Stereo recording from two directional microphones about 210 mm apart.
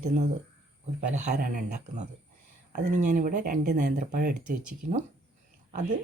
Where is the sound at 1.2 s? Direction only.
40° right (ahead or behind).